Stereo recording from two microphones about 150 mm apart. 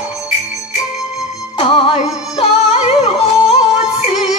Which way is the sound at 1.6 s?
35° left (ahead or behind).